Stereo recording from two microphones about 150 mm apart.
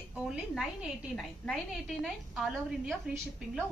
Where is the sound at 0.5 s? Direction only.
Centre (ahead or behind).